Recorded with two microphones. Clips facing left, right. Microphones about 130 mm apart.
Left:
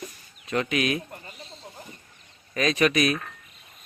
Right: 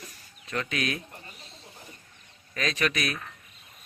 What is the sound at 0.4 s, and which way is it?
Speech, 20° left (ahead or behind).